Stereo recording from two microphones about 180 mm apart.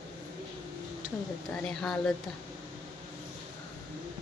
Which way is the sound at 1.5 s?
Centre (ahead or behind).